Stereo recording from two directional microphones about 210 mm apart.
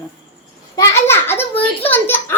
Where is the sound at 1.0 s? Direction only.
10° left (ahead or behind).